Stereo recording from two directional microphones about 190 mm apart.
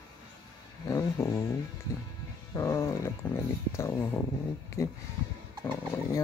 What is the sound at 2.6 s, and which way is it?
Speech, 15° left (ahead or behind).